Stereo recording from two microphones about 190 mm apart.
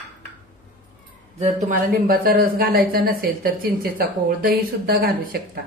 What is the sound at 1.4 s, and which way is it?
Speech, 40° right (ahead or behind).